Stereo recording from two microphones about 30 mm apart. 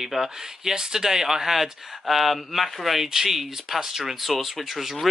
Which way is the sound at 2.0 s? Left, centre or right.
Centre.